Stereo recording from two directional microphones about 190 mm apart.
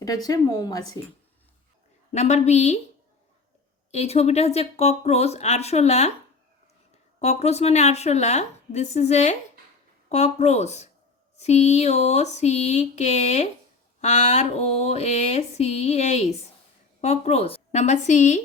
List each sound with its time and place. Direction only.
0.0 s a woman's voice: 20° left (ahead or behind)
2.1 s speech: 35° left (ahead or behind)
3.9 s speech: 35° left (ahead or behind)
7.2 s speech: 35° left (ahead or behind)